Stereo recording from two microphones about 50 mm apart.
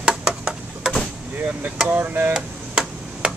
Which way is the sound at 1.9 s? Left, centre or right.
Right.